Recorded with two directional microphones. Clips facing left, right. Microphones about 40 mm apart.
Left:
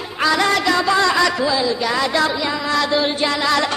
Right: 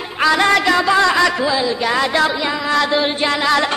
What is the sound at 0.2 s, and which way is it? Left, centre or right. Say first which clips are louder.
Music: right 3 dB; right.